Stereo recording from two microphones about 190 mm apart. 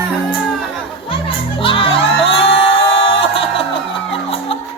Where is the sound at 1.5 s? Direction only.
25° left (ahead or behind).